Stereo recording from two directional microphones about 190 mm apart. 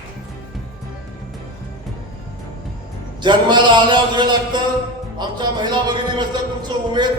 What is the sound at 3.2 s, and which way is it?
Speech, 25° right (ahead or behind).